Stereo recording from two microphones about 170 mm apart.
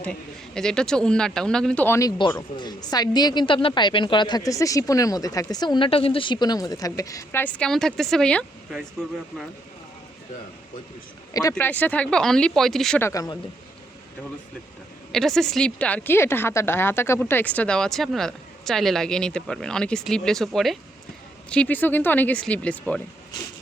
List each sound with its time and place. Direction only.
0.0 s a woman's voice: 5° left (ahead or behind)
11.5 s a woman's voice: 10° left (ahead or behind)
13.0 s speech: 15° left (ahead or behind)
15.1 s a woman's voice: centre (ahead or behind)